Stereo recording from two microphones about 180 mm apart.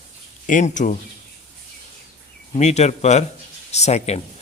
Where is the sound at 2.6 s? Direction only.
40° left (ahead or behind).